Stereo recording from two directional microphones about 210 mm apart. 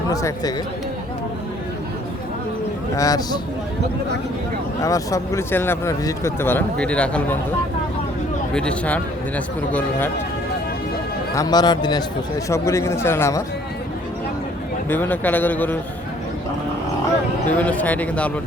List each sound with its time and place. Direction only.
0.1 s speech: 15° left (ahead or behind)
2.9 s speech: 15° left (ahead or behind)
4.8 s speech: 15° left (ahead or behind)
8.5 s speech: 5° left (ahead or behind)
11.3 s speech: 20° left (ahead or behind)
14.8 s speech: 10° left (ahead or behind)
17.5 s speech: 5° left (ahead or behind)